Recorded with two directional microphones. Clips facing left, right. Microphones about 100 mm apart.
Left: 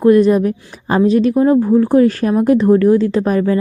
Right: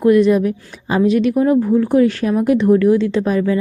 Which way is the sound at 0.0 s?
35° left (ahead or behind).